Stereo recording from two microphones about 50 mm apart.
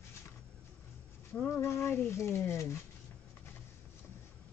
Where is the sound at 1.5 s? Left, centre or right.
Left.